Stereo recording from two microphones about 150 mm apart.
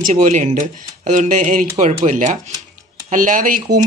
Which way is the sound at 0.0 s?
60° right (ahead or behind).